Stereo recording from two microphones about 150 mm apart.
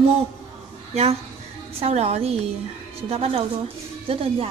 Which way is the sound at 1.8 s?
45° right (ahead or behind).